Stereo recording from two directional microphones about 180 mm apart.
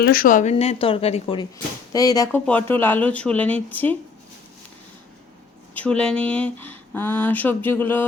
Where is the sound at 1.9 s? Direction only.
20° left (ahead or behind).